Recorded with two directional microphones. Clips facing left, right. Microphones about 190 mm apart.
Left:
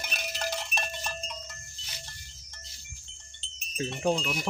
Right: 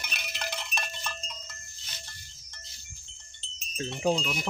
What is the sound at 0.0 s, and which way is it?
Sheep, 45° left (ahead or behind).